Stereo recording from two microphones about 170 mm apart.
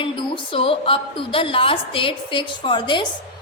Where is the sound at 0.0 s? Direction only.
30° left (ahead or behind).